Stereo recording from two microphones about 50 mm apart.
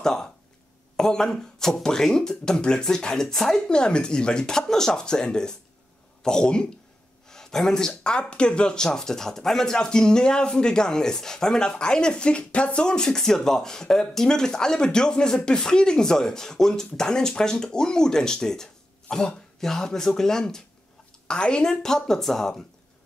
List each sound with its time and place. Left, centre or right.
0.0 s speech: centre
7.2 s a sound: centre
8.0 s speech: centre